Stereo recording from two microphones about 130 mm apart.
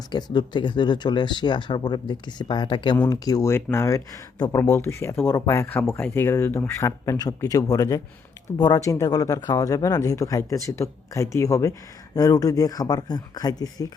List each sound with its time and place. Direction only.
0.1 s speech: 35° left (ahead or behind)